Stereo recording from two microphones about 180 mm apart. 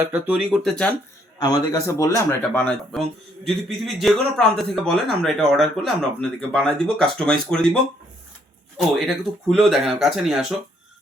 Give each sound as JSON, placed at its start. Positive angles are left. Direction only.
{"t": 0.0, "sound": "speech", "side_deg": -10}
{"t": 1.4, "sound": "a man's voice", "side_deg": 20}
{"t": 9.0, "sound": "a man's voice", "side_deg": 0}